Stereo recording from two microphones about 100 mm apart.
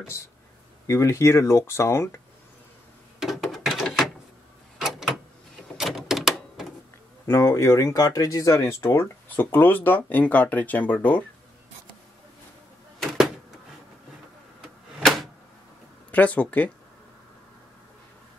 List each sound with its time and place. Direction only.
0.8 s speech: 30° left (ahead or behind)
3.2 s a sound: centre (ahead or behind)
7.2 s speech: 30° left (ahead or behind)
16.1 s speech: 15° left (ahead or behind)